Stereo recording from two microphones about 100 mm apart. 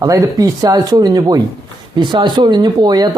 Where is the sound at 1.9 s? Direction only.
50° right (ahead or behind).